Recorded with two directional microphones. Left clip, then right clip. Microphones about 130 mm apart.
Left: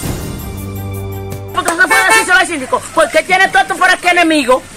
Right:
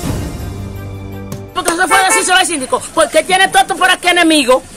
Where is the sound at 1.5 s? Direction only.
45° right (ahead or behind).